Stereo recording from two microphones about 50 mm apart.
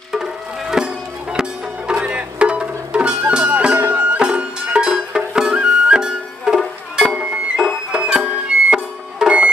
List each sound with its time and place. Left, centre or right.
0.1 s music: centre; by 4.2 s right
4.2 s music: right
7.9 s music: centre